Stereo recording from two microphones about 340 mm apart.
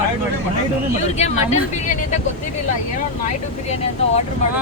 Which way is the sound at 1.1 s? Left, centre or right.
Centre.